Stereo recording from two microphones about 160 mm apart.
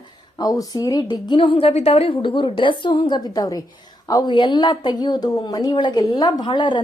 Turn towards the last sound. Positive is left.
turn(degrees=30)  # may be behind; listen again after turning